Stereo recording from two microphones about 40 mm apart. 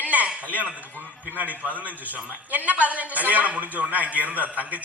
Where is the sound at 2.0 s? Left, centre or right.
Right.